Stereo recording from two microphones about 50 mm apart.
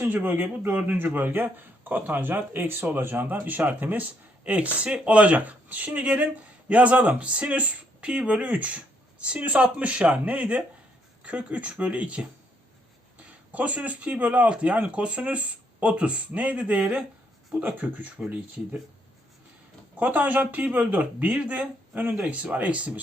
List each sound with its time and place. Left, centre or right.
0.1 s speech: right
13.5 s speech: right
20.0 s speech: right